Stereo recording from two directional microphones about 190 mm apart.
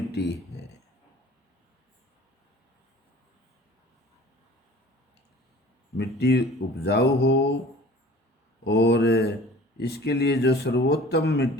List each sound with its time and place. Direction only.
0.1 s a sound: 60° left (ahead or behind)
6.0 s speech: 60° left (ahead or behind)
8.6 s speech: 65° left (ahead or behind)